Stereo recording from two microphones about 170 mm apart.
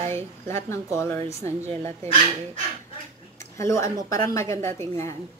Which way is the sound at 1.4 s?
40° right (ahead or behind).